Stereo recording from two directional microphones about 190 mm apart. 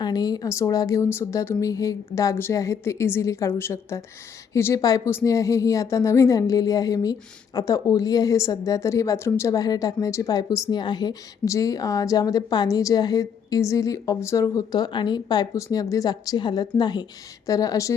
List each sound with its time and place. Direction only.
0.0 s a woman's voice: 20° left (ahead or behind)